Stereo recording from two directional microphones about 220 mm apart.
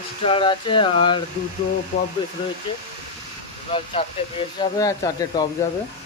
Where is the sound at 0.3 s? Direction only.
25° left (ahead or behind).